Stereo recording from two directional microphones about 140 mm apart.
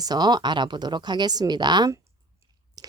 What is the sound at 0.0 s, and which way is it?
Speech, 30° right (ahead or behind).